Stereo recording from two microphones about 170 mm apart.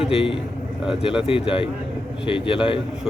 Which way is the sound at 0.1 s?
30° left (ahead or behind).